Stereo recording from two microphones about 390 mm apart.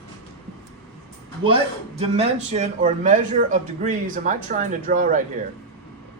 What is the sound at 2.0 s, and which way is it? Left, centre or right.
A man's voice, centre.